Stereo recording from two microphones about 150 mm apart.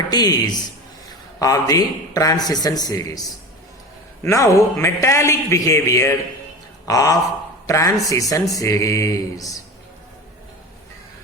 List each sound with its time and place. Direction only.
0.1 s a man's voice: 25° left (ahead or behind)